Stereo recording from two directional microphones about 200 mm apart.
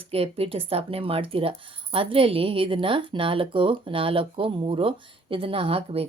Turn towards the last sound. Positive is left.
turn(degrees=-30)  # may be behind; listen again after turning